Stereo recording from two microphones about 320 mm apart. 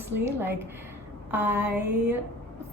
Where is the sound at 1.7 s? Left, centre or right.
Right.